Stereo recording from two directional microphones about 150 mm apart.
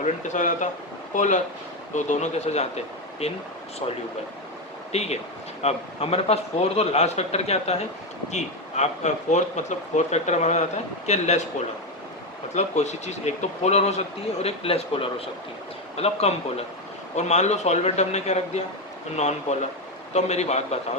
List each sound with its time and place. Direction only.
0.0 s speech: 55° left (ahead or behind)
4.9 s speech: 45° left (ahead or behind)
12.5 s speech: 50° left (ahead or behind)